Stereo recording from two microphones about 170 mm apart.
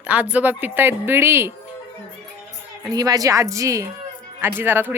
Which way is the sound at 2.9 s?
20° right (ahead or behind).